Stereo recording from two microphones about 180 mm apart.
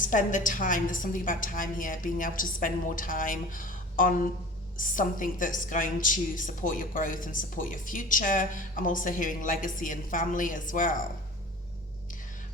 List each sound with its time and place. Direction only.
0.0 s a woman's voice: 45° left (ahead or behind)